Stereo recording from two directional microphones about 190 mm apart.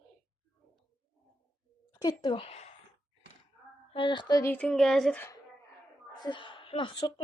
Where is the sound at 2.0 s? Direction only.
20° left (ahead or behind).